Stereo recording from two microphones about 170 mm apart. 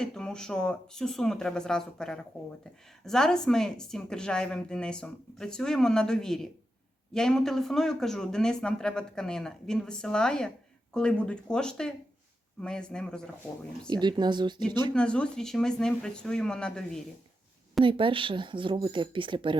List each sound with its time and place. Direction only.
0.0 s speech: 5° left (ahead or behind)
13.9 s speech: 25° right (ahead or behind)
14.9 s speech: 5° left (ahead or behind)
17.8 s speech: 30° right (ahead or behind)